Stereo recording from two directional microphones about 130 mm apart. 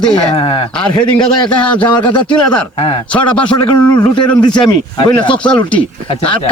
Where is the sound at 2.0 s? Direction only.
35° left (ahead or behind).